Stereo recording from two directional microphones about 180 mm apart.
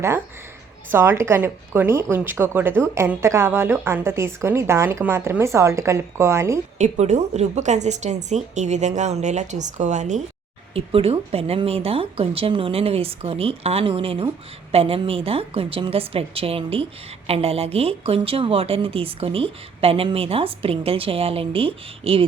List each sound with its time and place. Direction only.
0.9 s a woman's voice: 15° right (ahead or behind)
6.7 s speech: 40° right (ahead or behind)